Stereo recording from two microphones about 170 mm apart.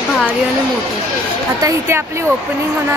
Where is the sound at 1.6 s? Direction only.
15° right (ahead or behind).